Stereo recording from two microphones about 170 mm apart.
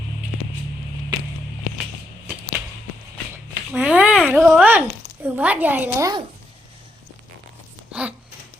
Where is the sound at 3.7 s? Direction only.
5° right (ahead or behind).